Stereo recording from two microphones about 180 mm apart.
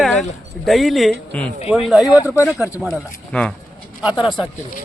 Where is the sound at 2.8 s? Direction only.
5° left (ahead or behind).